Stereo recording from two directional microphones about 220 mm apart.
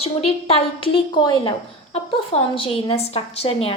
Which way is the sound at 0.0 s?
25° left (ahead or behind).